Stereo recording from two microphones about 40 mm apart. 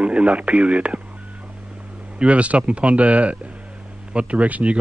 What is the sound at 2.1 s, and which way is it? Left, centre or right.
Speech, right.